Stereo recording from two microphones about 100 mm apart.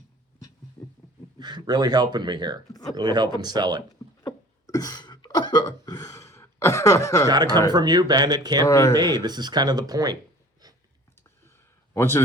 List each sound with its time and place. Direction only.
0.8 s a sound: 30° left (ahead or behind)
1.4 s speech: 50° right (ahead or behind)
4.2 s a sound: 35° left (ahead or behind)
7.3 s speech: 40° right (ahead or behind)
8.6 s speech: 30° left (ahead or behind)
9.0 s speech: 45° right (ahead or behind)
11.9 s speech: 25° left (ahead or behind)